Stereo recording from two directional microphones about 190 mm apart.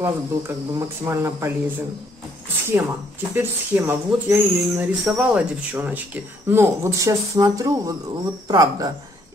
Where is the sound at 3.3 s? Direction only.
10° right (ahead or behind).